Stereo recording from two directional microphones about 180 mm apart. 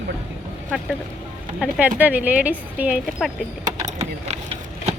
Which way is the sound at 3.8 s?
40° right (ahead or behind).